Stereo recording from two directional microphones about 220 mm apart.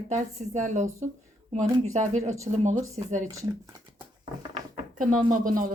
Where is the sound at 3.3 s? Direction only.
15° right (ahead or behind).